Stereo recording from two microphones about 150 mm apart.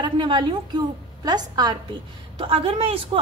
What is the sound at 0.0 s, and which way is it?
A woman's voice, 30° right (ahead or behind).